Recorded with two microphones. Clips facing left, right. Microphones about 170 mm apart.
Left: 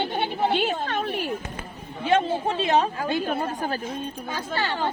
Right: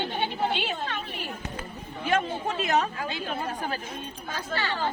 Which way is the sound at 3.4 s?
40° left (ahead or behind).